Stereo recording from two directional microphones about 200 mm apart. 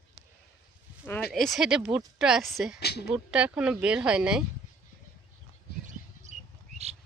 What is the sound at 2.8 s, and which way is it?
Speech, 55° left (ahead or behind).